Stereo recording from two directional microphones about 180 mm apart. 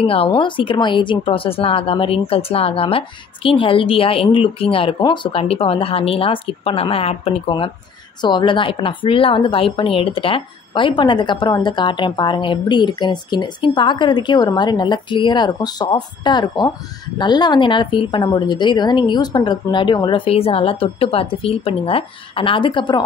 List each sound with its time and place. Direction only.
0.0 s a woman's voice: 30° left (ahead or behind)